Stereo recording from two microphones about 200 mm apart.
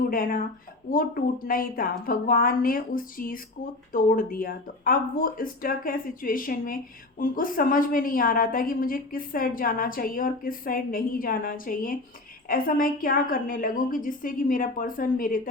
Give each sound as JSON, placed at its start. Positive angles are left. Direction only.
{"t": 0.1, "sound": "a woman's voice", "side_deg": 45}